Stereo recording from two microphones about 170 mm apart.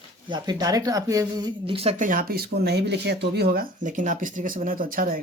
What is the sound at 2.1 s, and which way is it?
Speech, 60° right (ahead or behind).